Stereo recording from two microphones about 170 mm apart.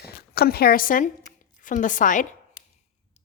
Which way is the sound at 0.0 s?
65° left (ahead or behind).